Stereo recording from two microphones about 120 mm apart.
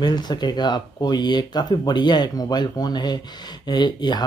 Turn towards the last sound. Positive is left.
turn(degrees=35)  # may be behind; listen again after turning